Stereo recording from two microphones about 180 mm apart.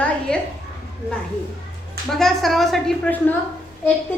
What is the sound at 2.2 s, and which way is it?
A woman's voice, centre (ahead or behind).